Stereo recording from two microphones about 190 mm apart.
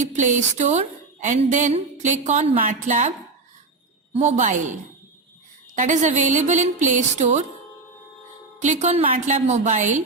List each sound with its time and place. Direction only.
0.0 s a woman's voice: 40° right (ahead or behind)
4.1 s speech: 35° right (ahead or behind)
5.7 s speech: 40° right (ahead or behind)
8.5 s speech: 40° right (ahead or behind)